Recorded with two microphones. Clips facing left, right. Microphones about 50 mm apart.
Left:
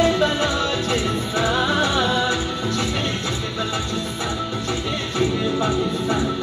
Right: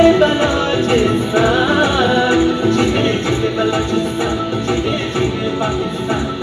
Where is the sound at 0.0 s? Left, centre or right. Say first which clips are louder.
Right 8 dB; right.